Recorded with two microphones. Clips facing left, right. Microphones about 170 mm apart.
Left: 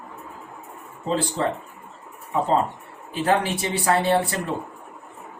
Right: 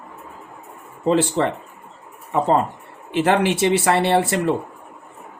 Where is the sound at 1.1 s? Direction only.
90° right.